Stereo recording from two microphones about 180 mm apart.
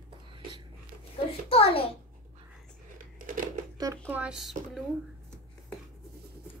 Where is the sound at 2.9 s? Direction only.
50° right (ahead or behind).